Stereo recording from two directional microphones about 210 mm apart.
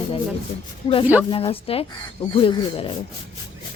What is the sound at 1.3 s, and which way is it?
Speech, 25° left (ahead or behind).